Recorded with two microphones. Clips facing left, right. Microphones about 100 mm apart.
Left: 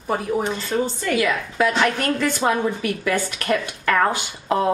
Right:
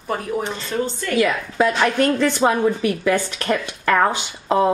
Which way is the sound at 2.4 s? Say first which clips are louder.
Right 3 dB; 20° right (ahead or behind).